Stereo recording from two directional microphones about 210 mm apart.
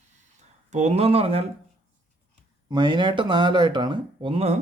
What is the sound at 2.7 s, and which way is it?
Speech, 20° right (ahead or behind).